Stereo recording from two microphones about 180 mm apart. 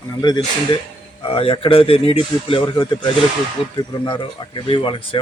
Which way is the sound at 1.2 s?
30° left (ahead or behind).